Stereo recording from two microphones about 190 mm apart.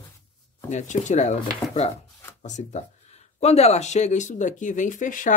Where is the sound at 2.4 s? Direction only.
40° left (ahead or behind).